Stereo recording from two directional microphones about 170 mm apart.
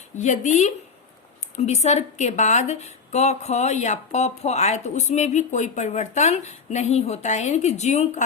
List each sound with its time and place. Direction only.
0.2 s a woman's voice: 45° left (ahead or behind)